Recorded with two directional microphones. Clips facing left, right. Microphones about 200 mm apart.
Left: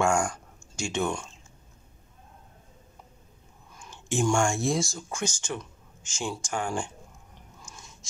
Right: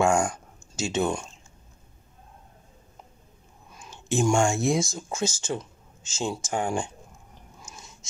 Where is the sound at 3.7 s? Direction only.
20° right (ahead or behind).